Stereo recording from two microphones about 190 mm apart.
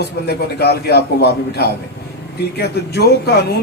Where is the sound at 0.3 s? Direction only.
55° left (ahead or behind).